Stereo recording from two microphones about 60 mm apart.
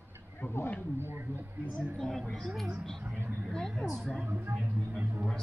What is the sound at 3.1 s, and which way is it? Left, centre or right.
Speech, right.